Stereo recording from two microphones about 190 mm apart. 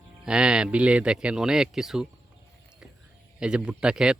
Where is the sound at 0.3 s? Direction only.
5° right (ahead or behind).